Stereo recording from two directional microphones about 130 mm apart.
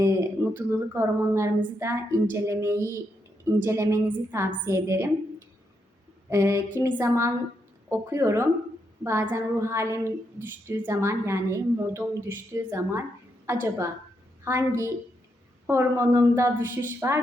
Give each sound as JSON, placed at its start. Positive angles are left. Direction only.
{"t": 0.0, "sound": "a woman's voice", "side_deg": -20}
{"t": 6.3, "sound": "a woman's voice", "side_deg": -20}